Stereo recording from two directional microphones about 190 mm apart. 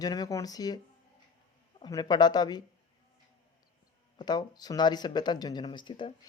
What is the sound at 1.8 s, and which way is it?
Speech, 20° left (ahead or behind).